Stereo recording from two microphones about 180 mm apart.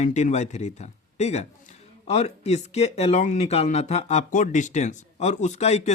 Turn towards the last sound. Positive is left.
turn(degrees=35)  # may be behind; listen again after turning